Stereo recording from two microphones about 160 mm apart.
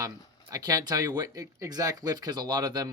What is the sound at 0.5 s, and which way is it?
Speech, 25° right (ahead or behind).